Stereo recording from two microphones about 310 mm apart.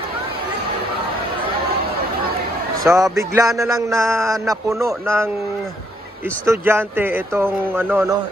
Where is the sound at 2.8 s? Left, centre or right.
Centre.